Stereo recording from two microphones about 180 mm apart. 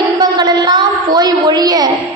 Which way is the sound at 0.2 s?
25° right (ahead or behind).